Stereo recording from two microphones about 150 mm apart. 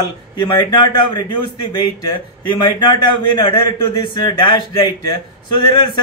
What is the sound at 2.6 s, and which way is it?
A man's voice, 25° left (ahead or behind).